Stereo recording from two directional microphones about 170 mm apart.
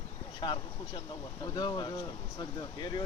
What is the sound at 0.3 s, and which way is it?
Speech, 30° left (ahead or behind).